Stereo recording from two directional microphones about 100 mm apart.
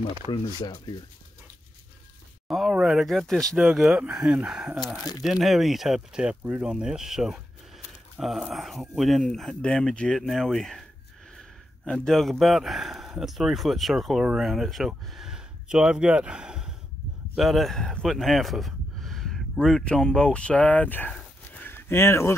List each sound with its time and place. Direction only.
2.5 s speech: 5° right (ahead or behind)
6.4 s speech: 15° right (ahead or behind)
6.7 s speech: 5° right (ahead or behind); by 21.1 s 15° left (ahead or behind)
21.1 s a sound: 15° left (ahead or behind)